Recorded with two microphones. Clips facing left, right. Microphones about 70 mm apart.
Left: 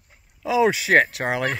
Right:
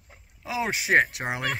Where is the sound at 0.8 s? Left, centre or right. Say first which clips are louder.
Left 4 dB; left.